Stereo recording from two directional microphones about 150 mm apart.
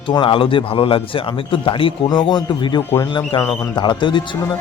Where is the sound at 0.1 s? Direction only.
35° left (ahead or behind).